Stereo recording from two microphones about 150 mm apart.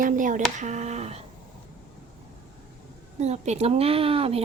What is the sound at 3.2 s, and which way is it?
A woman's voice, 50° right (ahead or behind).